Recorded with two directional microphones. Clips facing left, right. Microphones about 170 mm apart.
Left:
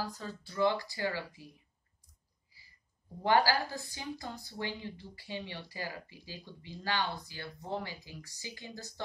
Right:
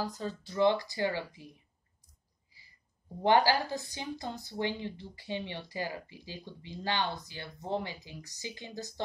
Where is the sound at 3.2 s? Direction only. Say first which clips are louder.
Right 2 dB; 20° right (ahead or behind).